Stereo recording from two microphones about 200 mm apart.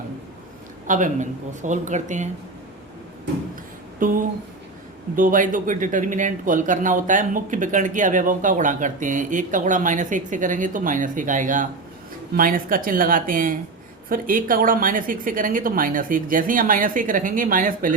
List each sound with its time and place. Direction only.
0.9 s speech: 40° right (ahead or behind)
4.0 s a woman's voice: 40° right (ahead or behind)